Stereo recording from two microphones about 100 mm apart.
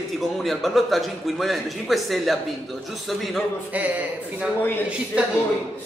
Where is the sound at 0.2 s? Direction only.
Centre (ahead or behind).